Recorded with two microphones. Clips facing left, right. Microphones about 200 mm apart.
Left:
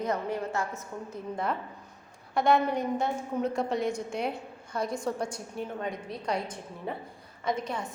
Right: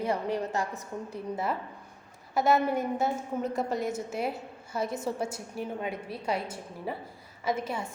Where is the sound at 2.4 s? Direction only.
5° right (ahead or behind).